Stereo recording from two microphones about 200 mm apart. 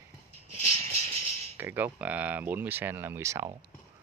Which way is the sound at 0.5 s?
30° right (ahead or behind).